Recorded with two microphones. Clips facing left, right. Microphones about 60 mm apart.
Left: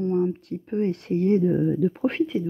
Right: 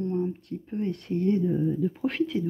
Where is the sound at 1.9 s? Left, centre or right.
Left.